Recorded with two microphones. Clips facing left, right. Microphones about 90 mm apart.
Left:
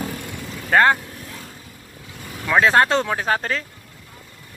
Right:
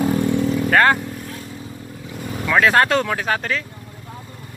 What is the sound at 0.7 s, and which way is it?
Speech, 20° left (ahead or behind).